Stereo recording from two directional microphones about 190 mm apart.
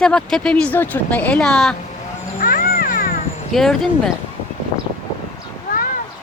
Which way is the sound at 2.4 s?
45° left (ahead or behind).